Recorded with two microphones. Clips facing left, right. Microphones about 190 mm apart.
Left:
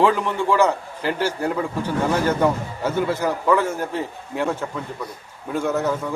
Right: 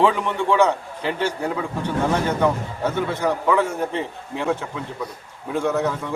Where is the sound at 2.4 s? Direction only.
5° left (ahead or behind).